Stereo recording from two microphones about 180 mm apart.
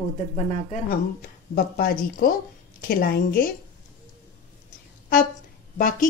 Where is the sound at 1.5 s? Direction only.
55° left (ahead or behind).